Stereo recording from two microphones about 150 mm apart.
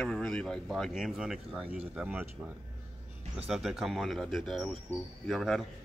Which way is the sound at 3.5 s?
Centre (ahead or behind).